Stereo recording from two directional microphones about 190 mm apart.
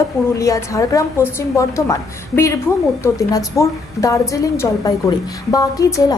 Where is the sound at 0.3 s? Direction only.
15° left (ahead or behind).